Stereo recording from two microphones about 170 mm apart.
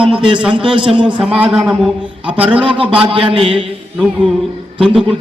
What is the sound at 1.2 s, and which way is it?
Speech, 5° right (ahead or behind).